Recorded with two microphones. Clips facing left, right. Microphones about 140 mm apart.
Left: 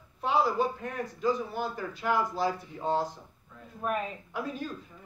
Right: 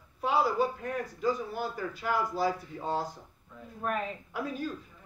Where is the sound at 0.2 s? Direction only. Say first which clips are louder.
Left 1 dB; 5° right (ahead or behind).